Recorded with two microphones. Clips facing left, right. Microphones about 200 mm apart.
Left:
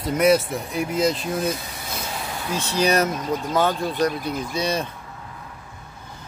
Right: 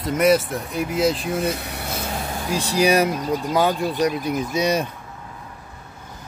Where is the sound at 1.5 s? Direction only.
65° right (ahead or behind).